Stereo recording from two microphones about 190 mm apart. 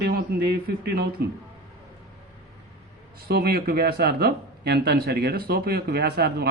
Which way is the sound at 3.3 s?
55° right (ahead or behind).